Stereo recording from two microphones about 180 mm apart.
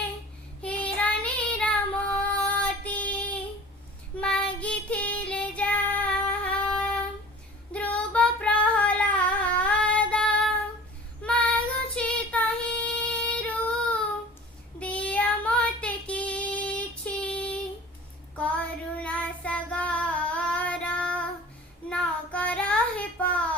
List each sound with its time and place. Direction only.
0.6 s child singing: 5° left (ahead or behind)
7.7 s female singing: 5° left (ahead or behind)
11.2 s child singing: 10° left (ahead or behind)